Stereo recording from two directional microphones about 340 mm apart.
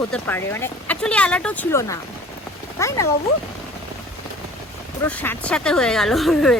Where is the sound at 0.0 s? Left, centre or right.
Centre.